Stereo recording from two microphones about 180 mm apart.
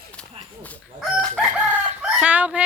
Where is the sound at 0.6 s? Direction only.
5° left (ahead or behind).